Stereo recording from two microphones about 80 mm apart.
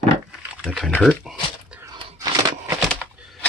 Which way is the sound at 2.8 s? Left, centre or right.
Centre.